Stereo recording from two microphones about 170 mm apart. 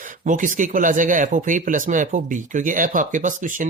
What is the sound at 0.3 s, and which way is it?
Speech, 50° right (ahead or behind).